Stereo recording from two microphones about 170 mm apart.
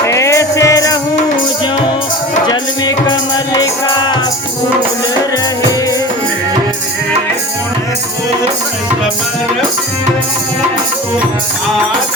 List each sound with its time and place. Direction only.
0.0 s music: 20° left (ahead or behind)
2.5 s music: 25° left (ahead or behind)